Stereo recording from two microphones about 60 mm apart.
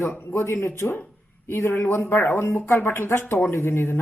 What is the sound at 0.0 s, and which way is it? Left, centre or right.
Speech, left.